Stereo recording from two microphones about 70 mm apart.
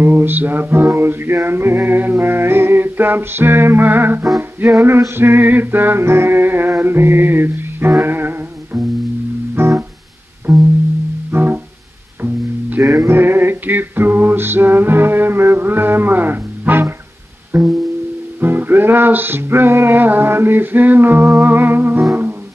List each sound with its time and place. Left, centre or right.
0.0 s music: right
10.5 s music: centre
11.3 s music: right
12.8 s male singing: right
17.5 s music: right
18.4 s music: right